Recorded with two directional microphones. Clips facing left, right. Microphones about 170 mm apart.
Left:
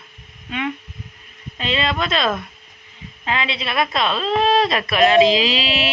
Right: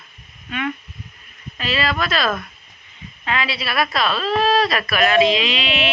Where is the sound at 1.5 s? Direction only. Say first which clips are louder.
Even; 25° left (ahead or behind).